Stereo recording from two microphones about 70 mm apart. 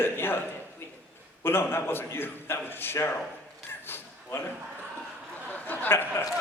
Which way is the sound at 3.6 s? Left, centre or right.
Left.